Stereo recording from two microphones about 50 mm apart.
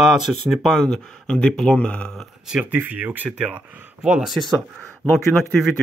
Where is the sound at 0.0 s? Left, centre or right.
Centre.